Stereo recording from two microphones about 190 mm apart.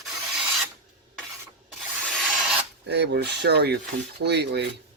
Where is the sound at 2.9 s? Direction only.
60° right (ahead or behind).